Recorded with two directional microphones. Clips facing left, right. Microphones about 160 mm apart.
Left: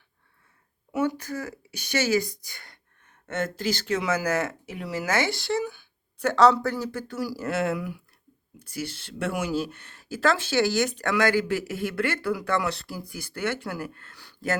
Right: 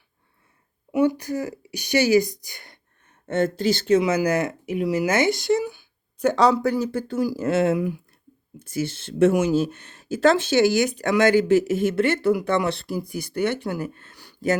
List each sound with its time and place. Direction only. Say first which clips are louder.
0.9 s speech: right 6 dB; 15° right (ahead or behind)
3.2 s speech: right 7 dB; 30° right (ahead or behind)